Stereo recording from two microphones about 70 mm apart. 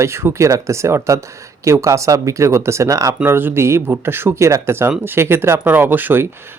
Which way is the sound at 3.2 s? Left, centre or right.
Right.